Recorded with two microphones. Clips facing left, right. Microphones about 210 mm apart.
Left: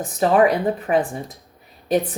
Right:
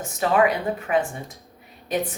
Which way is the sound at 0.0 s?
35° left (ahead or behind).